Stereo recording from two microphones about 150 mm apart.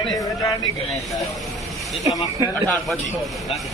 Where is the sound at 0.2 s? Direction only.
25° left (ahead or behind).